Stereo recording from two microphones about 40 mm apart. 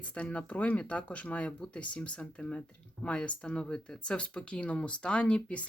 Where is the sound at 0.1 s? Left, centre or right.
Left.